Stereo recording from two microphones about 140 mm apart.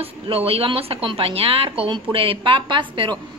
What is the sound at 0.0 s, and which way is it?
A woman's voice, 45° right (ahead or behind).